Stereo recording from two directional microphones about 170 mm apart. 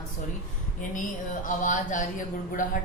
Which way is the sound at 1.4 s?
50° left (ahead or behind).